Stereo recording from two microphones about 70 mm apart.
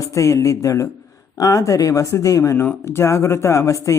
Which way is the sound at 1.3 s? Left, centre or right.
Left.